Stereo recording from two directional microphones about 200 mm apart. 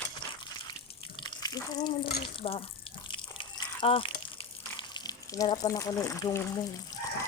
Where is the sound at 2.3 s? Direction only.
30° left (ahead or behind).